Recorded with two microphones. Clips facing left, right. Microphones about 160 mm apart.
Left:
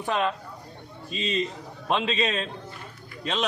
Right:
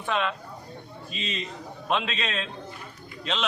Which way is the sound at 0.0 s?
40° left (ahead or behind).